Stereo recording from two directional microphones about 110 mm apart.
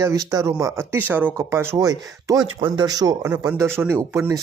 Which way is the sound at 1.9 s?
35° right (ahead or behind).